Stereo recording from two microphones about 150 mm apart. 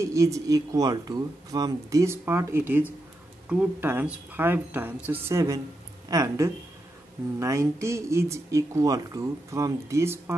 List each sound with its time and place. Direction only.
0.0 s speech: 20° right (ahead or behind)